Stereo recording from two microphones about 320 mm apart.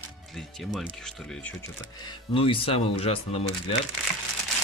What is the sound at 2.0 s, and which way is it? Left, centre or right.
Speech, centre.